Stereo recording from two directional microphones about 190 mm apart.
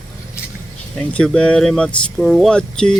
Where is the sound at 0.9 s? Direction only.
5° left (ahead or behind).